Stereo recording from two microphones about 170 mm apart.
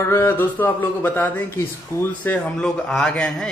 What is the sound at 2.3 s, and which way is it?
A man's voice, 5° left (ahead or behind).